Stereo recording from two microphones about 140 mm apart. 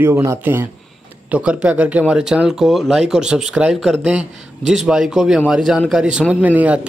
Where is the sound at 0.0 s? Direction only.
20° right (ahead or behind).